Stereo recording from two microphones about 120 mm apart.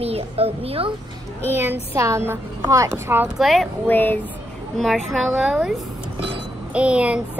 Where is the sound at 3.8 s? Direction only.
15° left (ahead or behind).